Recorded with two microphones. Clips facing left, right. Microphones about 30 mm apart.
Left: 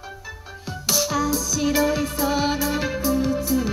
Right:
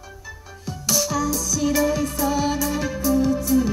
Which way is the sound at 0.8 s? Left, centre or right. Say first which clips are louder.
Even; left.